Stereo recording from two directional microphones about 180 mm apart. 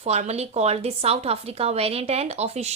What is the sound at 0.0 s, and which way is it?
A woman's voice, 35° right (ahead or behind).